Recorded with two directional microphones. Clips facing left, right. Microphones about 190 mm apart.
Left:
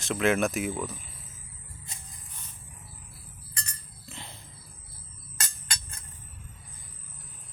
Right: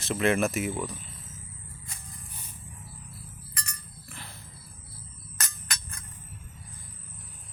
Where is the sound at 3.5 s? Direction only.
25° left (ahead or behind).